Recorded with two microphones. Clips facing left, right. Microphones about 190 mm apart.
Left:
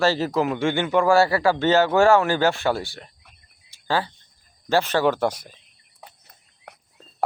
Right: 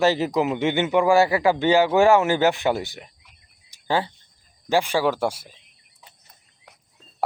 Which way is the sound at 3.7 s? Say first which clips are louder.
Right 1 dB; 20° right (ahead or behind).